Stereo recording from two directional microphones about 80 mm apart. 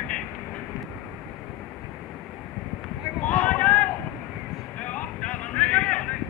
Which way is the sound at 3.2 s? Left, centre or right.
Centre.